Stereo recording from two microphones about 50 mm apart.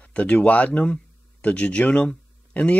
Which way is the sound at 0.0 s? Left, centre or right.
Left.